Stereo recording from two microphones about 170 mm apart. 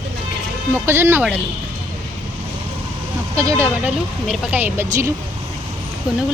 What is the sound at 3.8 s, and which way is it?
Speech, 10° right (ahead or behind).